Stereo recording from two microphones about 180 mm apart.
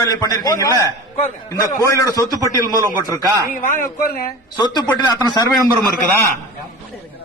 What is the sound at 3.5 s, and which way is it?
Speech, 50° left (ahead or behind).